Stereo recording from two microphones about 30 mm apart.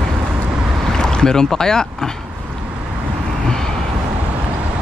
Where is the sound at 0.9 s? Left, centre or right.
Left.